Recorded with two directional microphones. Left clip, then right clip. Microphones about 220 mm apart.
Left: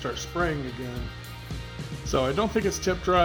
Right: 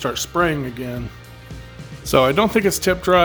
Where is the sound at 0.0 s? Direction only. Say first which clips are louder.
Right 9 dB; 45° right (ahead or behind).